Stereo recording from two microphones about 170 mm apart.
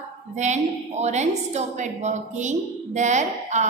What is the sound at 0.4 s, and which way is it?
A woman's voice, 40° right (ahead or behind).